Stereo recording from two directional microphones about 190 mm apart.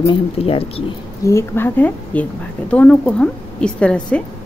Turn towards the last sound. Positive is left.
turn(degrees=5)  # may be behind; listen again after turning